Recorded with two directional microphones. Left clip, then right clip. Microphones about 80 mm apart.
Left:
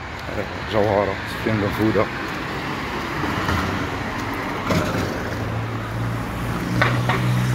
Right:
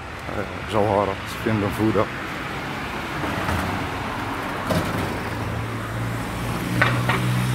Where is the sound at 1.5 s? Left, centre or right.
Right.